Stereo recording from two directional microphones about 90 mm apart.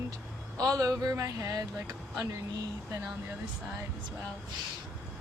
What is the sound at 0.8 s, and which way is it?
Speech, 40° right (ahead or behind).